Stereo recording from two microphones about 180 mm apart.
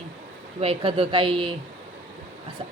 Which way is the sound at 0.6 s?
30° right (ahead or behind).